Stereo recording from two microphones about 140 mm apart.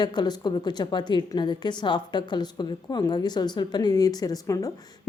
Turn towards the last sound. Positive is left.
turn(degrees=25)  # may be behind; listen again after turning